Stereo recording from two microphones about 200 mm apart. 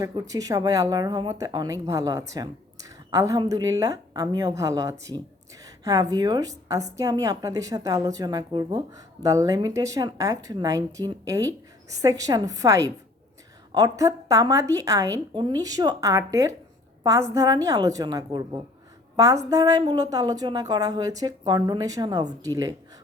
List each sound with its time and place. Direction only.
0.0 s a woman's voice: 15° right (ahead or behind)